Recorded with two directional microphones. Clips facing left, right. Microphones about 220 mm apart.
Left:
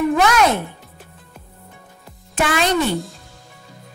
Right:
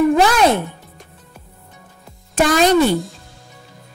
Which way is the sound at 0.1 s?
30° right (ahead or behind).